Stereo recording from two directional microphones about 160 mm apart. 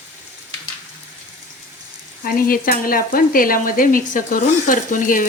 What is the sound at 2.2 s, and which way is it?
Sizzle, 65° left (ahead or behind).